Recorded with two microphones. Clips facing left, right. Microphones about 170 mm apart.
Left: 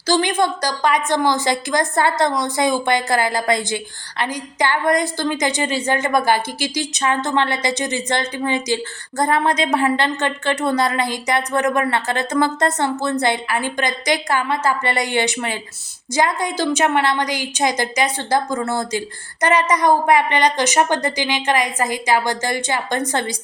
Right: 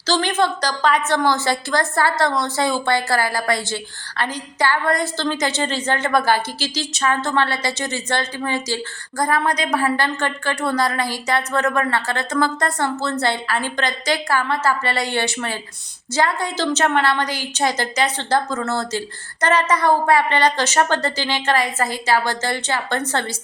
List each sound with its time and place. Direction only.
0.1 s a woman's voice: 15° left (ahead or behind)